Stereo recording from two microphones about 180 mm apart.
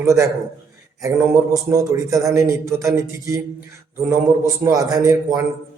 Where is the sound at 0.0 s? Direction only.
15° right (ahead or behind).